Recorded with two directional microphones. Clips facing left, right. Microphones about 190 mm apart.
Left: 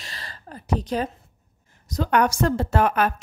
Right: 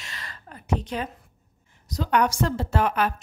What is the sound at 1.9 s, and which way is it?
A woman's voice, 50° left (ahead or behind).